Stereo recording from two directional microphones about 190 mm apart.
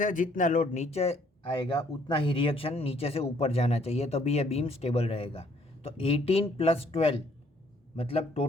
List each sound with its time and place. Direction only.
0.0 s speech: 40° left (ahead or behind)